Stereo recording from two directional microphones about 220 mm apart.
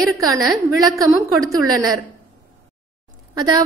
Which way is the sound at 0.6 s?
15° right (ahead or behind).